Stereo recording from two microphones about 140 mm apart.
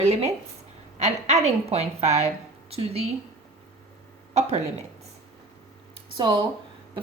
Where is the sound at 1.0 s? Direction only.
50° right (ahead or behind).